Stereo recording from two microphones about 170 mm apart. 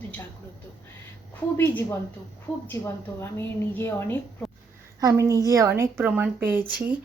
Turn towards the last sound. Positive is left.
turn(degrees=-10)  # may be behind; listen again after turning